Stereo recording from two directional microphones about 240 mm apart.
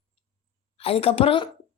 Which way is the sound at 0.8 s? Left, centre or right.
Left.